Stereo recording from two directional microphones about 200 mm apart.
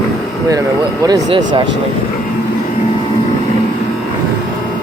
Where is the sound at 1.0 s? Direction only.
20° right (ahead or behind).